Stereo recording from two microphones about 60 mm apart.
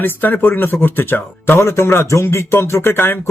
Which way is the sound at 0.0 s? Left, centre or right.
Left.